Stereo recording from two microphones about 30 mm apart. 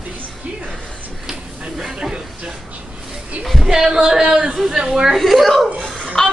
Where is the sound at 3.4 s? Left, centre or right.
Centre.